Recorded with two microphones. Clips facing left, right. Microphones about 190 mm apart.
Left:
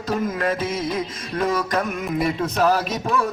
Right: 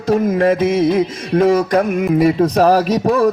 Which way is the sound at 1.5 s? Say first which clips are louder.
Right 9 dB; 30° right (ahead or behind).